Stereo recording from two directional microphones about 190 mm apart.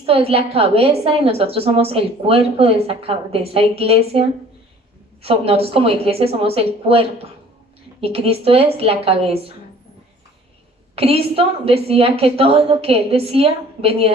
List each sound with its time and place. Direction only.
0.0 s a woman's voice: 30° right (ahead or behind)
10.9 s a woman's voice: 30° right (ahead or behind)